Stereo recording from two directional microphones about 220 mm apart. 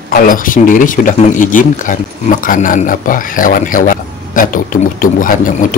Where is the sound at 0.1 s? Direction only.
40° left (ahead or behind).